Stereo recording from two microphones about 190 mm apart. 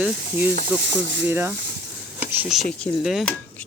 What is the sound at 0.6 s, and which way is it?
Speech, 65° right (ahead or behind).